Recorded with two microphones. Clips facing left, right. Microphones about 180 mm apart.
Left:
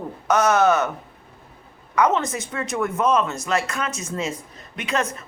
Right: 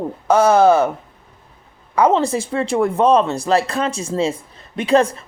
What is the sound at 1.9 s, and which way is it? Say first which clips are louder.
A woman's voice: right 5 dB; 30° right (ahead or behind).